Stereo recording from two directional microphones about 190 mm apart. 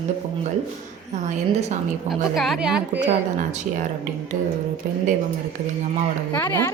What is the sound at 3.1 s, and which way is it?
Speech, 40° right (ahead or behind).